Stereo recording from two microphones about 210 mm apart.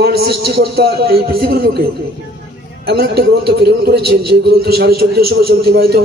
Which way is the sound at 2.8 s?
50° right (ahead or behind).